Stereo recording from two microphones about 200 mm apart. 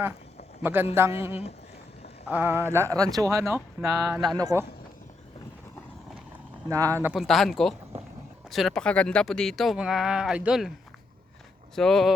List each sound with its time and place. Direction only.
0.6 s speech: 10° right (ahead or behind)
6.7 s speech: 15° right (ahead or behind)
11.7 s speech: centre (ahead or behind)